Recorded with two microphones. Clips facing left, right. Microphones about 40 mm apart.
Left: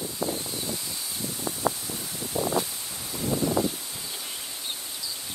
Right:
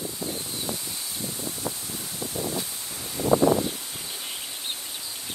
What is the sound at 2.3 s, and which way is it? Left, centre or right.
Rustling leaves, left.